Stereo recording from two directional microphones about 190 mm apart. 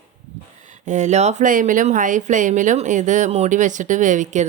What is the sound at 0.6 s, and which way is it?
Speech, 40° right (ahead or behind).